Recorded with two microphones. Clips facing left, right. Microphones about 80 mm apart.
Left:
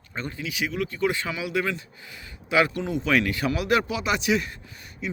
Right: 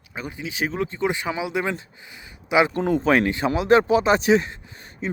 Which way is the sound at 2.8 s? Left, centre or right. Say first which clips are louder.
Right 5 dB; right.